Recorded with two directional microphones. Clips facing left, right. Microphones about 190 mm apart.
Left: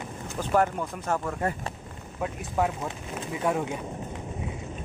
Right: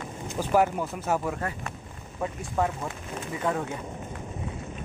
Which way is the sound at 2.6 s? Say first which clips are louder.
Left 1 dB; 10° left (ahead or behind).